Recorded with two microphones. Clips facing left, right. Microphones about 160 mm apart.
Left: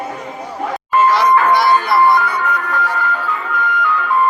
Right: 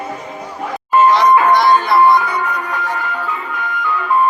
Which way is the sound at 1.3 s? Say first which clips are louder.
Right 1 dB; 20° right (ahead or behind).